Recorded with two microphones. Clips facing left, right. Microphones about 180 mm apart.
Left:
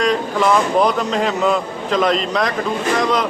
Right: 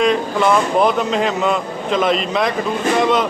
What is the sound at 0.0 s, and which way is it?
Speech, centre (ahead or behind).